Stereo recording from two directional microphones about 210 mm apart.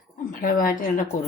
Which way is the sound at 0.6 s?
40° left (ahead or behind).